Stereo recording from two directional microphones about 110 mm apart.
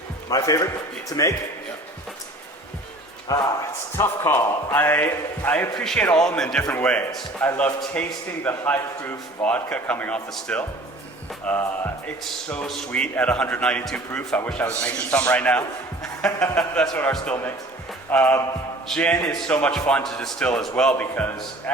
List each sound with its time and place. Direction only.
0.3 s a man's voice: 30° left (ahead or behind)
3.3 s a man's voice: 30° left (ahead or behind); by 21.2 s 10° left (ahead or behind)